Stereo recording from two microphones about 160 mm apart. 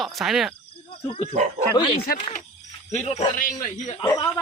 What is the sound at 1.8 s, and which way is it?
Speech, 35° left (ahead or behind).